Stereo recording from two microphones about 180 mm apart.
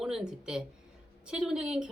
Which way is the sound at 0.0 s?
5° right (ahead or behind).